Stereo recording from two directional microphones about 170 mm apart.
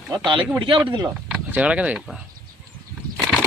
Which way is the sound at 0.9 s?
25° right (ahead or behind).